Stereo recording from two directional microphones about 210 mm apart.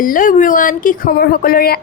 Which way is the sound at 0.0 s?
40° left (ahead or behind).